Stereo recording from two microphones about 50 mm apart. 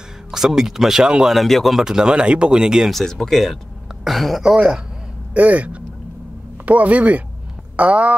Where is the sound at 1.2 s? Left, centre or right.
Centre.